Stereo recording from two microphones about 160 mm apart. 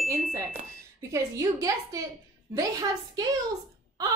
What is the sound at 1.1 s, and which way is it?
A woman's voice, 20° right (ahead or behind).